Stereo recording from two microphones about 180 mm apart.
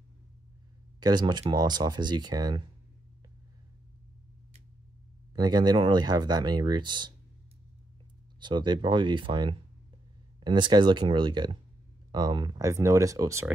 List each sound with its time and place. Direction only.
0.9 s speech: 20° right (ahead or behind)
5.3 s speech: 25° right (ahead or behind)
8.4 s speech: 25° right (ahead or behind)